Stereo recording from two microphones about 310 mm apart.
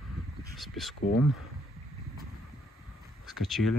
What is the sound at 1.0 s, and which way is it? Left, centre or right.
Speech, left.